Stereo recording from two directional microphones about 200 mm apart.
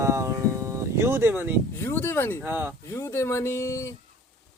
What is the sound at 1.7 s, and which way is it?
Speech, 10° left (ahead or behind).